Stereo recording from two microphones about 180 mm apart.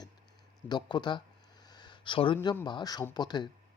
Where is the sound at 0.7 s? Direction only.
25° left (ahead or behind).